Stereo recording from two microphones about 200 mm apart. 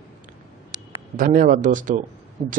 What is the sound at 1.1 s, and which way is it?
A man's voice, 40° right (ahead or behind).